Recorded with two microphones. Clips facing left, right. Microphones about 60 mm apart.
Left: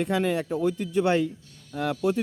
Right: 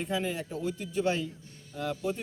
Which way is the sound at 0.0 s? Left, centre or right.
Left.